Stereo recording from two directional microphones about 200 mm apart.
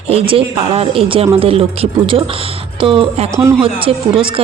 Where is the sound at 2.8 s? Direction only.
25° right (ahead or behind).